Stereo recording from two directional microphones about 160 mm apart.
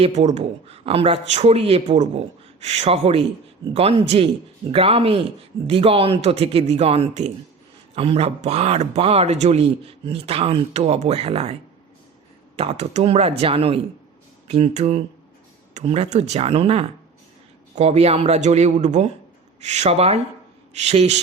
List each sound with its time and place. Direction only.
0.0 s speech: 45° right (ahead or behind)
12.5 s speech: 45° right (ahead or behind)